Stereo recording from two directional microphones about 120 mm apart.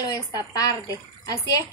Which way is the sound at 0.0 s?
30° left (ahead or behind).